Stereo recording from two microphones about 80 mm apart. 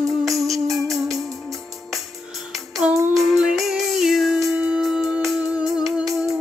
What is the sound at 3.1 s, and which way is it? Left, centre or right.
Music, centre.